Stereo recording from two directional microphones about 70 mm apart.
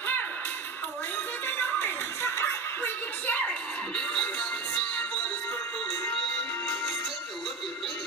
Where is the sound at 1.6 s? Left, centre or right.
Left; by 5.0 s centre.